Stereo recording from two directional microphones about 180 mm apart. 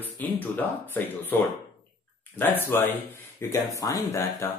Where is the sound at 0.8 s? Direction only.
10° left (ahead or behind).